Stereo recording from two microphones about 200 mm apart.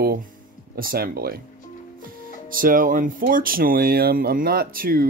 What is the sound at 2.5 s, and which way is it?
Speech, 45° right (ahead or behind).